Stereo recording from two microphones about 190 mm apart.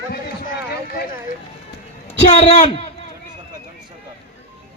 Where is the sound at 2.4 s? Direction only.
30° left (ahead or behind).